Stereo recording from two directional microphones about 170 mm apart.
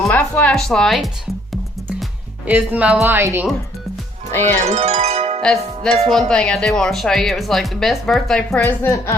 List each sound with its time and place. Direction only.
0.1 s speech: 10° left (ahead or behind)
2.5 s a woman's voice: 10° right (ahead or behind)
4.6 s speech: 40° right (ahead or behind)
5.4 s music: 5° left (ahead or behind)
6.1 s speech: 5° left (ahead or behind)